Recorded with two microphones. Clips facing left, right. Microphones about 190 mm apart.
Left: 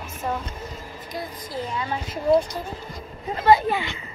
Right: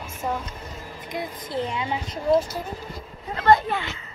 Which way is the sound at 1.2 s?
25° right (ahead or behind).